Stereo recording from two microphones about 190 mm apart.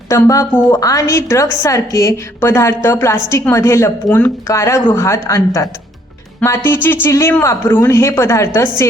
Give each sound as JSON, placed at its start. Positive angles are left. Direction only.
{"t": 0.1, "sound": "a woman's voice", "side_deg": 15}
{"t": 6.4, "sound": "a woman's voice", "side_deg": 10}